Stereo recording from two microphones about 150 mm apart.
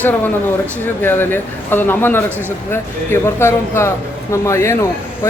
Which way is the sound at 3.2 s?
15° left (ahead or behind).